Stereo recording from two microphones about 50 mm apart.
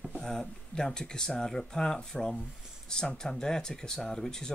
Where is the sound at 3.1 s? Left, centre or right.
Centre.